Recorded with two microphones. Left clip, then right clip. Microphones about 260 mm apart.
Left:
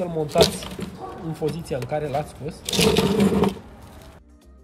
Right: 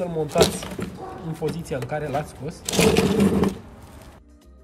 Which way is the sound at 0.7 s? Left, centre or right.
Centre.